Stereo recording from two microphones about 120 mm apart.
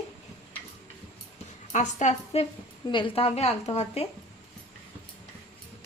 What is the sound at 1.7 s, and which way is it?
Speech, 75° left (ahead or behind).